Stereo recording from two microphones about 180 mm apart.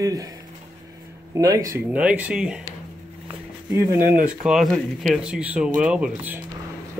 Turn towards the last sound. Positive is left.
turn(degrees=-5)  # may be behind; listen again after turning